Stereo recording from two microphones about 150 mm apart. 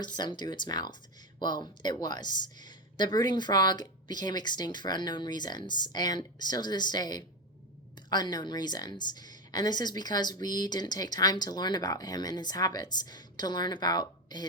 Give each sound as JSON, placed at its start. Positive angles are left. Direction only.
{"t": 0.0, "sound": "speech", "side_deg": 30}